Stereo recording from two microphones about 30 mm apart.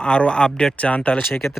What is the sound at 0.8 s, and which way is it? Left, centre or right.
Speech, left.